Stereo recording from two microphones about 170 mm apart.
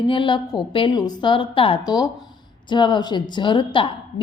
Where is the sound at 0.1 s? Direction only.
30° left (ahead or behind).